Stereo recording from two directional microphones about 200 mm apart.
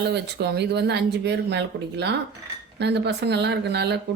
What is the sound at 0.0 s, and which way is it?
A woman's voice, 55° right (ahead or behind).